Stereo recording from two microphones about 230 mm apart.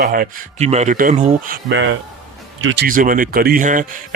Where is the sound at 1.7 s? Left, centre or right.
Right.